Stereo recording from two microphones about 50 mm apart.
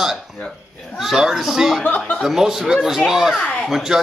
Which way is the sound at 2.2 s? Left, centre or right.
Centre.